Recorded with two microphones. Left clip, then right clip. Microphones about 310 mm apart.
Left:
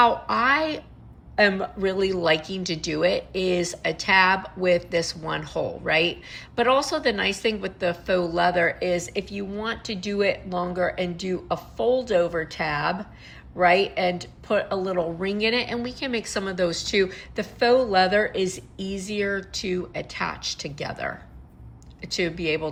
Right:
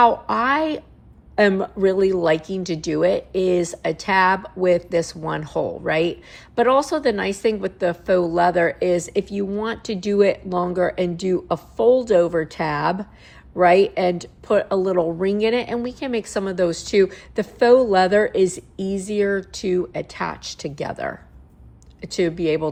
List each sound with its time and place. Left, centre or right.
0.0 s speech: centre